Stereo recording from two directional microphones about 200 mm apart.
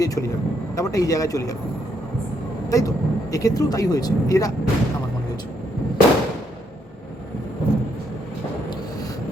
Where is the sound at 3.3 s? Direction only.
15° left (ahead or behind).